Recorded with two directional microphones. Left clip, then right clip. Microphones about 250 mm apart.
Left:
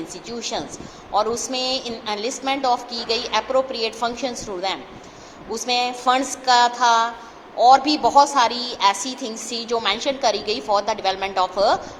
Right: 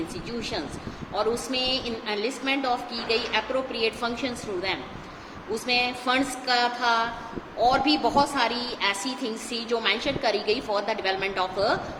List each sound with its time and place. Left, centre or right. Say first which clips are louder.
0.3 s a woman's voice: left 7 dB; centre